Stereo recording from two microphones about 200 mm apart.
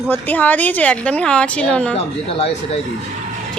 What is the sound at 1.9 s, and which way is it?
Speech, 30° left (ahead or behind).